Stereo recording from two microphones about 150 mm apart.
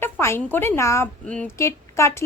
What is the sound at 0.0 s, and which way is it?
A woman's voice, 15° left (ahead or behind).